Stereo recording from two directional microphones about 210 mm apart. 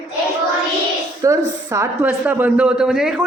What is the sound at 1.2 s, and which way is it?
Speech, 15° right (ahead or behind).